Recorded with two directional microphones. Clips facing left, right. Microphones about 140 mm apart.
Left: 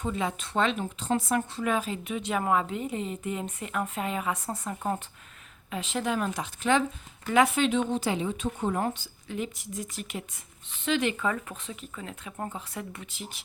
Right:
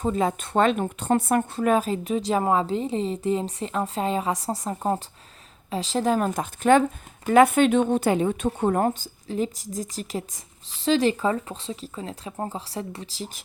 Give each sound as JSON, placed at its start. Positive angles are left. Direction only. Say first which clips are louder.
{"t": 0.0, "sound": "speech", "louder": "right 7 dB", "side_deg": -40}